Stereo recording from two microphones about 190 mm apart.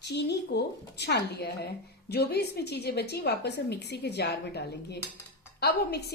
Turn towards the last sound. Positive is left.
turn(degrees=60)  # may be behind; listen again after turning